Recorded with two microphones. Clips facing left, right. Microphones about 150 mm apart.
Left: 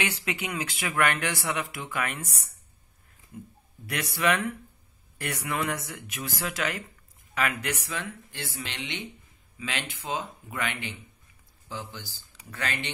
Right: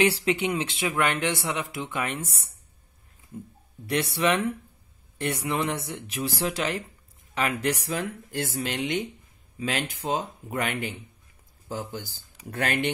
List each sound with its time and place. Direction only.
0.0 s speech: 30° right (ahead or behind)
2.2 s speech: centre (ahead or behind)
3.9 s speech: 30° right (ahead or behind); by 12.9 s 50° right (ahead or behind)